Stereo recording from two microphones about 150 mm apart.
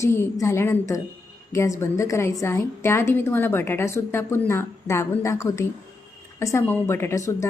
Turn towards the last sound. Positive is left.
turn(degrees=20)  # may be behind; listen again after turning